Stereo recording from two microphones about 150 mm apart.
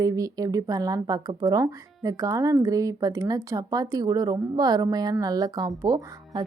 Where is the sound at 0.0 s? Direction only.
25° right (ahead or behind).